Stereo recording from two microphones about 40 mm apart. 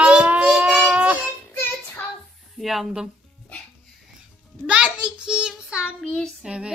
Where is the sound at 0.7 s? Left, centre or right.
Right.